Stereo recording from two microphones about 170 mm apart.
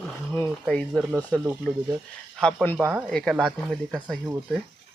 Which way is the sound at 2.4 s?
5° left (ahead or behind).